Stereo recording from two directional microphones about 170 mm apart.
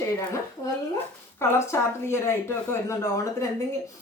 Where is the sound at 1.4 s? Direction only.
15° left (ahead or behind).